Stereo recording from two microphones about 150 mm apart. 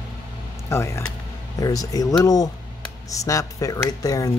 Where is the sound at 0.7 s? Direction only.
20° left (ahead or behind).